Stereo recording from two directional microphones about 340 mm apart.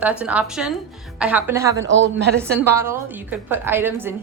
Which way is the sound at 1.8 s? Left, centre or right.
Right.